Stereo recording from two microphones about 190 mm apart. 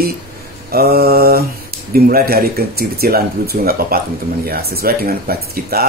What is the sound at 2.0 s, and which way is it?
Speech, 55° right (ahead or behind).